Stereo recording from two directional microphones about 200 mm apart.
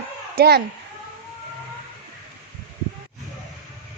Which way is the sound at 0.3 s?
55° right (ahead or behind).